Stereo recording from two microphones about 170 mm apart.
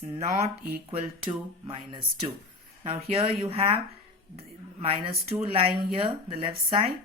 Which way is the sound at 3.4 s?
35° right (ahead or behind).